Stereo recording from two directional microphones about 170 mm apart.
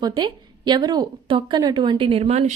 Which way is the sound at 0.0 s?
25° right (ahead or behind).